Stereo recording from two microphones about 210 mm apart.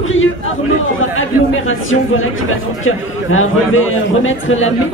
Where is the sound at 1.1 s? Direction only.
70° left (ahead or behind).